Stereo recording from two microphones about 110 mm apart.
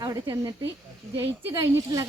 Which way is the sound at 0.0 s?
30° right (ahead or behind).